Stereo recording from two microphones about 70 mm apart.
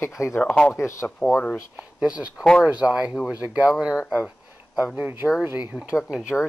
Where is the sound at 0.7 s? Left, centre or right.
Left.